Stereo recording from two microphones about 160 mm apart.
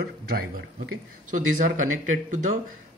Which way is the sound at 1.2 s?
50° right (ahead or behind).